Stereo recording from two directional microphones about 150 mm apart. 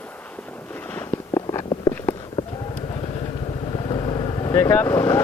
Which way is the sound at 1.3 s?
25° left (ahead or behind).